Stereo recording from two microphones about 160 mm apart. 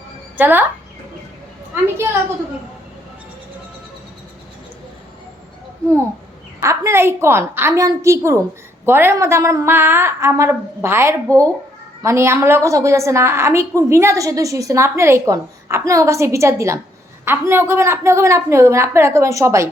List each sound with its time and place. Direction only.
0.3 s speech: 10° right (ahead or behind)
6.6 s a woman's voice: 20° right (ahead or behind)